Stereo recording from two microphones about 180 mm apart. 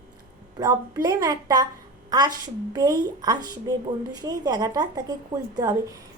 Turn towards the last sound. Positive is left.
turn(degrees=-20)  # may be behind; listen again after turning